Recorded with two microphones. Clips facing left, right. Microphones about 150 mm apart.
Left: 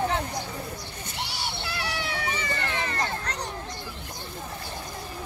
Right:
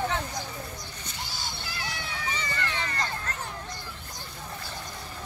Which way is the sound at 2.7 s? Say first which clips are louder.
Left 3 dB; 55° left (ahead or behind).